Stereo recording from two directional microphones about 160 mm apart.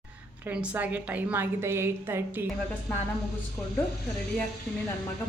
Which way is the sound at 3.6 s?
5° left (ahead or behind).